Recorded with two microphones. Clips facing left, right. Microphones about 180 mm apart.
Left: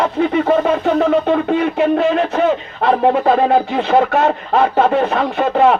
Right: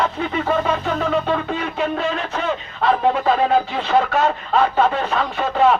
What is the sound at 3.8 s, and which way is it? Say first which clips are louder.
A man's voice: left 4 dB; 55° left (ahead or behind).